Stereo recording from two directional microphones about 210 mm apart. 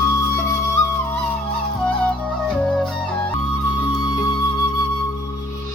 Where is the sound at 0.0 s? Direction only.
15° left (ahead or behind).